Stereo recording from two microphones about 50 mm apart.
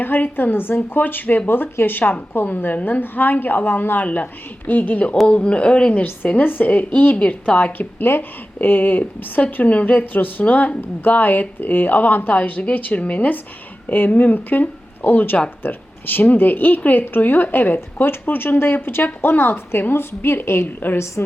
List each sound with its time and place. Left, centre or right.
0.0 s a woman's voice: left
6.3 s a woman's voice: left